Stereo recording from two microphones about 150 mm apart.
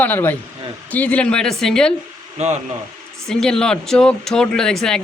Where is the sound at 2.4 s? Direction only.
50° right (ahead or behind).